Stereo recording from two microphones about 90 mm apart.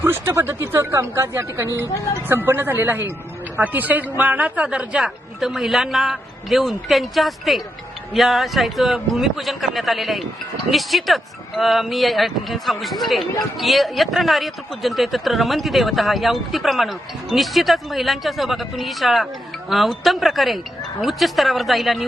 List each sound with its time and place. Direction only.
0.0 s speech: 25° right (ahead or behind); by 22.0 s centre (ahead or behind)